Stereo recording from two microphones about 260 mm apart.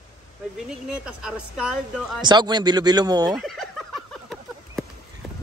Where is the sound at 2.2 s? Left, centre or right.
Centre.